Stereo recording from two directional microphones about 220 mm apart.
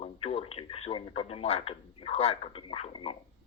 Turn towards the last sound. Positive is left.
turn(degrees=25)  # may be behind; listen again after turning